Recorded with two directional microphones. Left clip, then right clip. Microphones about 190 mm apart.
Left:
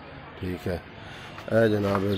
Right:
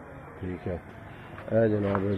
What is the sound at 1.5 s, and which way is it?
Speech, 15° left (ahead or behind).